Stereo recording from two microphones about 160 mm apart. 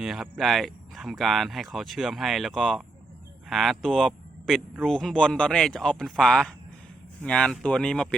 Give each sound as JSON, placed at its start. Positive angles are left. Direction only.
{"t": 0.0, "sound": "speech", "side_deg": 0}